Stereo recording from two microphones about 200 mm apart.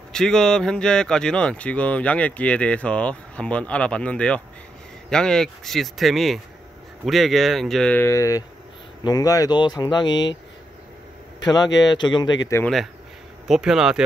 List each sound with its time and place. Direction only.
0.1 s speech: 5° left (ahead or behind); by 10.2 s 20° left (ahead or behind)
11.4 s speech: 20° left (ahead or behind)
13.5 s speech: 5° right (ahead or behind)